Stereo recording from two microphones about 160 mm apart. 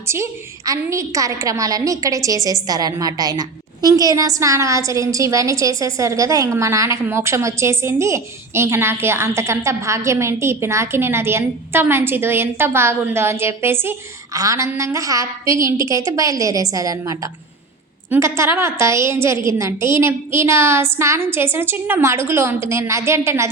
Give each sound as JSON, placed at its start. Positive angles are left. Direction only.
{"t": 0.1, "sound": "a woman's voice", "side_deg": -20}